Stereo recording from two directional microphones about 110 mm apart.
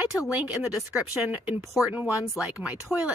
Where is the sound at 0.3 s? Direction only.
10° right (ahead or behind).